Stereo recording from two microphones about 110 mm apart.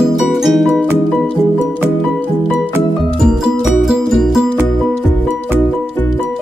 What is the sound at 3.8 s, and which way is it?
Music, centre (ahead or behind).